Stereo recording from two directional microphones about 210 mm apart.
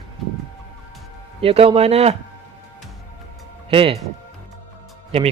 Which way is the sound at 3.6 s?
25° right (ahead or behind).